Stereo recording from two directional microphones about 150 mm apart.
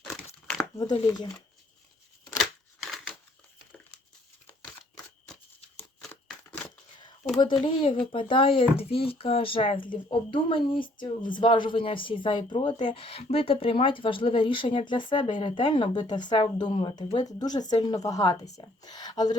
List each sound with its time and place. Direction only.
0.8 s speech: 30° left (ahead or behind)
2.4 s scissors: centre (ahead or behind)
5.3 s a sound: 5° left (ahead or behind)
7.6 s speech: 35° left (ahead or behind)